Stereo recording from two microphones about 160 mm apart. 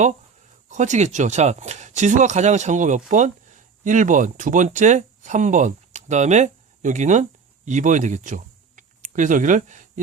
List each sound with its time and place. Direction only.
0.7 s speech: 50° right (ahead or behind)